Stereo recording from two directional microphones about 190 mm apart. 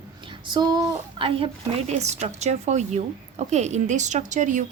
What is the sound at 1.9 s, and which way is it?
A woman's voice, 35° right (ahead or behind).